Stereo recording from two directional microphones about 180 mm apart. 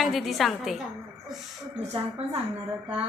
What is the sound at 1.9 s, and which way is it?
Speech, 35° right (ahead or behind).